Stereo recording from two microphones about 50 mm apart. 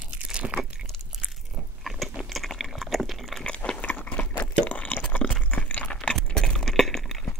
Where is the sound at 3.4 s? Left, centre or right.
Centre.